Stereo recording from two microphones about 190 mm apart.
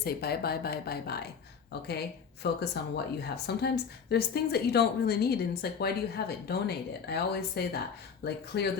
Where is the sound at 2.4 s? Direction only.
60° left (ahead or behind).